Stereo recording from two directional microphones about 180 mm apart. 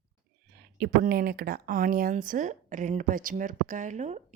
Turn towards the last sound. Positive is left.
turn(degrees=-40)  # may be behind; listen again after turning